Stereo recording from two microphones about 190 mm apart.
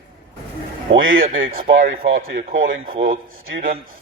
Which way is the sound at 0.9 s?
90° right.